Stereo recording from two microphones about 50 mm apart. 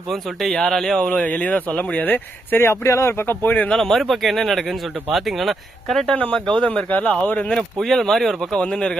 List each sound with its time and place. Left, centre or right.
0.1 s speech: centre
0.9 s speech: centre
1.2 s speech: left
2.6 s speech: left
3.2 s speech: left
3.8 s speech: centre
6.3 s speech: centre
6.8 s speech: left
7.8 s speech: centre
8.6 s speech: centre